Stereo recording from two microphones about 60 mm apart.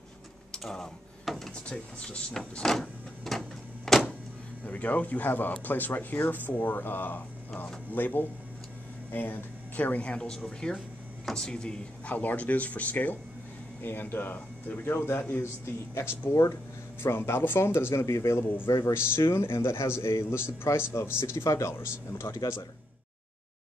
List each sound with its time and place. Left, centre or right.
0.5 s a sound: centre
1.2 s drawer open or close: centre
1.5 s speech: centre
3.3 s printer: centre
4.6 s speech: left
10.0 s speech: centre
12.2 s speech: left
13.8 s a man's voice: left